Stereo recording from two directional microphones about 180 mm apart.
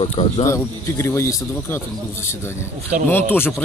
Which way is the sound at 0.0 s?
30° left (ahead or behind).